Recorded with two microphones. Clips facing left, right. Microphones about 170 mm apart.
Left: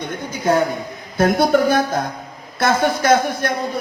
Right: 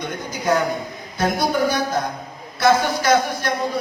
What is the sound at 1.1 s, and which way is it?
A man's voice, 50° left (ahead or behind).